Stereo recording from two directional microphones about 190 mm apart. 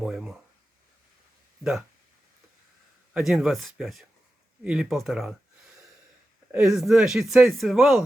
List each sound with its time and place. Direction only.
0.0 s speech: centre (ahead or behind)
3.1 s speech: 5° right (ahead or behind)
6.5 s speech: 5° right (ahead or behind)